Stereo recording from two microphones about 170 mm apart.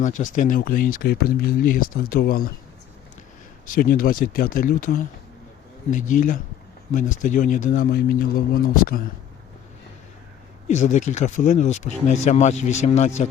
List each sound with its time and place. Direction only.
0.0 s speech: 45° left (ahead or behind)
3.7 s a man's voice: 60° left (ahead or behind)
10.7 s a man's voice: 45° left (ahead or behind)